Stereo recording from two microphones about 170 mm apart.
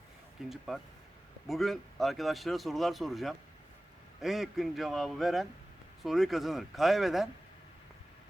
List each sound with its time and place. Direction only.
0.4 s speech: centre (ahead or behind)